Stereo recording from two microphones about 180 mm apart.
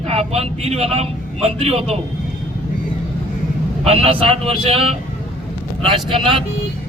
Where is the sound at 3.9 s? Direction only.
35° right (ahead or behind).